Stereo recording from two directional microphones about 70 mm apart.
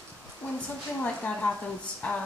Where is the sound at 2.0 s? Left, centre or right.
Left.